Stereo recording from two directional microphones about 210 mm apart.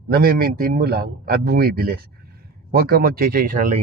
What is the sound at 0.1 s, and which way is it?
Speech, 45° right (ahead or behind).